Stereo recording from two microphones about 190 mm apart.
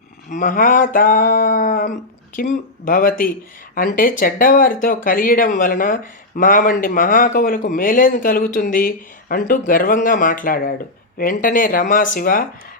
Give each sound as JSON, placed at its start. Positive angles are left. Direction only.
{"t": 0.3, "sound": "speech", "side_deg": 45}